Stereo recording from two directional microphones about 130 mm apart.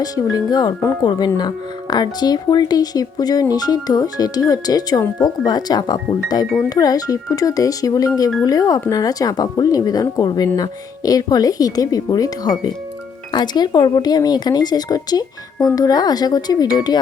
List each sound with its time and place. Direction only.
0.0 s speech: 30° left (ahead or behind)